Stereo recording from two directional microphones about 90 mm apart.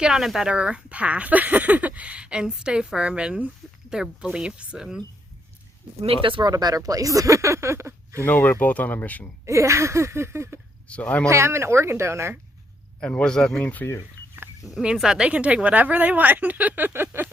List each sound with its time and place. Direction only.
0.0 s speech: 5° right (ahead or behind)
6.0 s speech: 80° right
6.5 s speech: 45° right (ahead or behind)
8.2 s speech: 20° left (ahead or behind)
9.5 s speech: 35° right (ahead or behind)
10.8 s speech: 15° left (ahead or behind)
11.3 s speech: 30° right (ahead or behind)
13.0 s speech: 15° left (ahead or behind)
14.7 s speech: 5° right (ahead or behind); by 17.2 s 25° right (ahead or behind)